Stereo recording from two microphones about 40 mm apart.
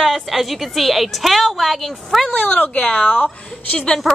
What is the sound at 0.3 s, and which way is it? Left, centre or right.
Speech, centre.